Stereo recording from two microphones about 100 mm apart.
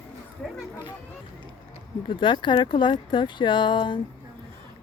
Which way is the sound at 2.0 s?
55° left (ahead or behind).